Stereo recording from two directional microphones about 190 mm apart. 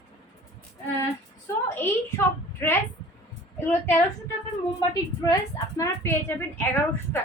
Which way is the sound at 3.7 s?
10° left (ahead or behind).